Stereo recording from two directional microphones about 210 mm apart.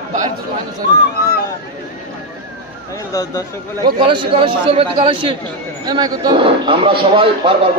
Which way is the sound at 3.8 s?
20° right (ahead or behind).